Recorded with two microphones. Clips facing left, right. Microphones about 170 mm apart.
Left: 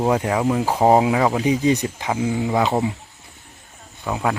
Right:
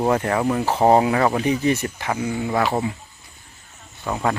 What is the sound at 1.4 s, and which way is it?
Speech, 15° left (ahead or behind).